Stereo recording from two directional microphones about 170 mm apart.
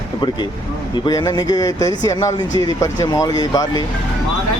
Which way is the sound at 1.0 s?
20° left (ahead or behind).